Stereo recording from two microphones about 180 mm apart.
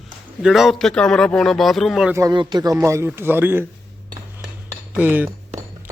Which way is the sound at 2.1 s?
20° right (ahead or behind).